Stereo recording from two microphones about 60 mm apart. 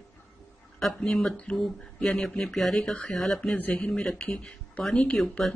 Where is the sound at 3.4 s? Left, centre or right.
Left.